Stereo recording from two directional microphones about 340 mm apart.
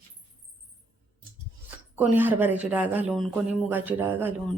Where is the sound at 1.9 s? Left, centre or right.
Centre.